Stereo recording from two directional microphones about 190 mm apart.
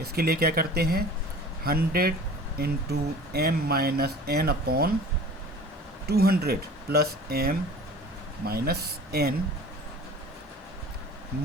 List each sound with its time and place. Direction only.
0.0 s speech: 55° right (ahead or behind)
6.1 s speech: 55° right (ahead or behind)